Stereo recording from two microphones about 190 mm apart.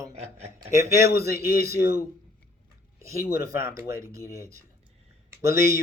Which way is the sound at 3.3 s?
55° left (ahead or behind).